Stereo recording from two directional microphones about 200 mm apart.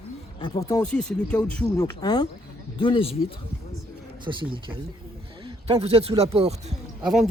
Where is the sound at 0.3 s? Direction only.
25° left (ahead or behind).